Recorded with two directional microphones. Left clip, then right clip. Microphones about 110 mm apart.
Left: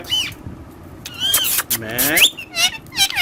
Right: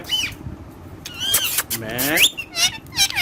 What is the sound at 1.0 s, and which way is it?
Vehicle, centre (ahead or behind).